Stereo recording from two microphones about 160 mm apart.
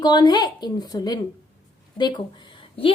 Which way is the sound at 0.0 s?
25° left (ahead or behind).